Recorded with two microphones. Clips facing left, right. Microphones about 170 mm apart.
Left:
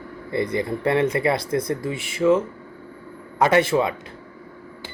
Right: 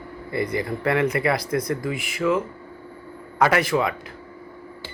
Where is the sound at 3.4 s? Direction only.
25° left (ahead or behind).